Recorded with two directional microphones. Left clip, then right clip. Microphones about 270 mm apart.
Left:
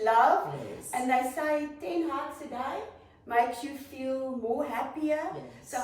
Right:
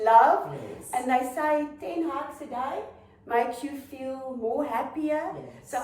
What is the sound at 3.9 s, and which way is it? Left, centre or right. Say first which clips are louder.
A woman's voice: left 4 dB; centre.